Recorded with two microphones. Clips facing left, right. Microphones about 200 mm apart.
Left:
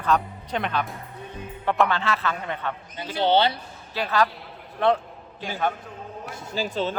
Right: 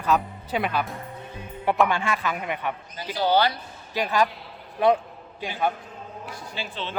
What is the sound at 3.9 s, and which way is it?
A man's voice, 15° right (ahead or behind).